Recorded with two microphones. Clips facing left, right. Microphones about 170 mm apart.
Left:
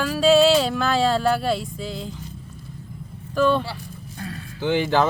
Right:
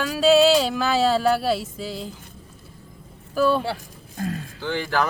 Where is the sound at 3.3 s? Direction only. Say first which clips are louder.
Left 1 dB; 10° right (ahead or behind).